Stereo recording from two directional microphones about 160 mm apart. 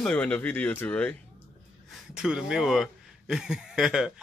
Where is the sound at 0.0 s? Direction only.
5° left (ahead or behind).